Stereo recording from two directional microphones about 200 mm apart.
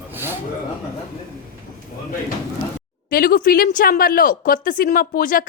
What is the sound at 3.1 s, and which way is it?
A woman's voice, 45° left (ahead or behind).